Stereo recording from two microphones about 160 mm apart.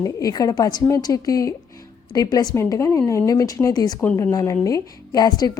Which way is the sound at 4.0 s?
10° left (ahead or behind).